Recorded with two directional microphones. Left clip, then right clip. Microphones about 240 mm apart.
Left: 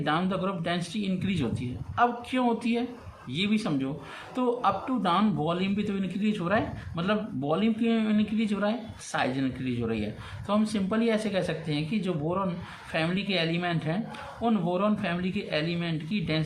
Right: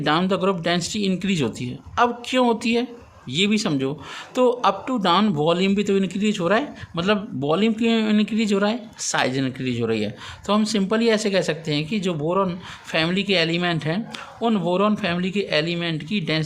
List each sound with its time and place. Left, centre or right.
0.0 s speech: right